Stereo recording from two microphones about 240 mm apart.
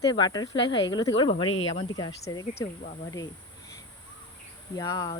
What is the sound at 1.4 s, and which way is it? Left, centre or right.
Speech, left.